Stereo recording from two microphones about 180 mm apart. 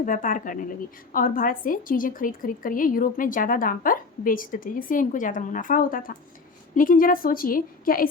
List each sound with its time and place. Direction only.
0.0 s a woman's voice: 50° left (ahead or behind)